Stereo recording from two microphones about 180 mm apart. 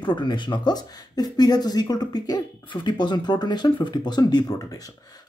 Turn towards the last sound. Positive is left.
turn(degrees=20)  # may be behind; listen again after turning